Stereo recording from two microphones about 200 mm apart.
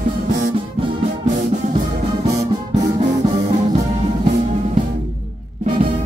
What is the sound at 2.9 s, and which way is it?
Music, 35° right (ahead or behind).